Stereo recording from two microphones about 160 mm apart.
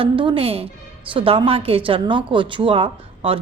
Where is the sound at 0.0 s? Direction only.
35° right (ahead or behind).